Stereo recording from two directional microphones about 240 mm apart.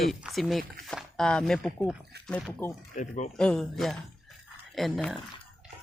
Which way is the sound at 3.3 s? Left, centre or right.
Centre.